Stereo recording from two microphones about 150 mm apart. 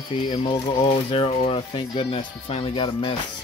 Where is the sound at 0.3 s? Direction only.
35° left (ahead or behind).